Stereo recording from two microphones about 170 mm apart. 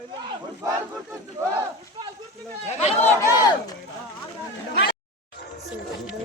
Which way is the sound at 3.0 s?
15° left (ahead or behind).